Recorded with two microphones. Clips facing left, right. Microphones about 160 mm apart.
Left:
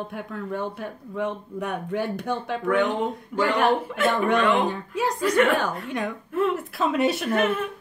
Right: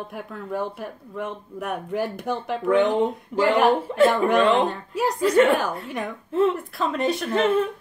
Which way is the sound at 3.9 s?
35° right (ahead or behind).